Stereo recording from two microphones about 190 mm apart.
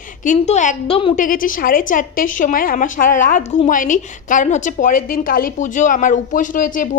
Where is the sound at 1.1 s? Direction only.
45° left (ahead or behind).